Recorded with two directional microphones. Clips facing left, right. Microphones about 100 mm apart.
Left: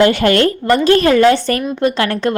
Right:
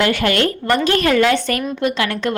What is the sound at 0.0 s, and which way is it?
A woman's voice, 30° left (ahead or behind).